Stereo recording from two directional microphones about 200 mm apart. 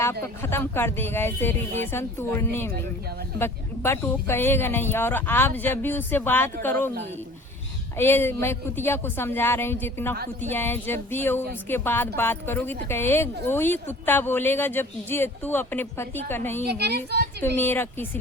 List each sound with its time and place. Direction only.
0.0 s speech: 10° left (ahead or behind)
7.9 s speech: 10° left (ahead or behind)
16.6 s a woman's voice: 55° right (ahead or behind)
17.6 s speech: 10° left (ahead or behind)